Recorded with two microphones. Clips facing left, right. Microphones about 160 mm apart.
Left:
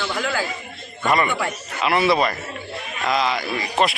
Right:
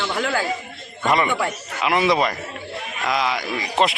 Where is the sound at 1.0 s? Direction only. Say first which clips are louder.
Right 1 dB; 20° right (ahead or behind).